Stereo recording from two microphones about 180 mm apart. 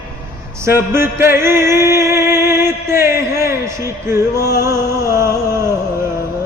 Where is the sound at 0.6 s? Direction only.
15° right (ahead or behind).